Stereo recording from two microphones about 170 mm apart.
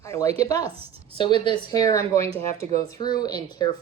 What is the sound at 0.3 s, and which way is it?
Speech, 20° left (ahead or behind).